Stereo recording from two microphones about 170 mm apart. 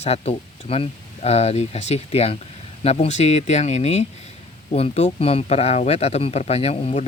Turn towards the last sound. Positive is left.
turn(degrees=35)  # may be behind; listen again after turning